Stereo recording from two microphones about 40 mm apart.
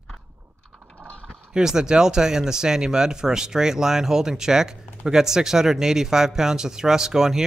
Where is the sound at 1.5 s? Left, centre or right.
Centre.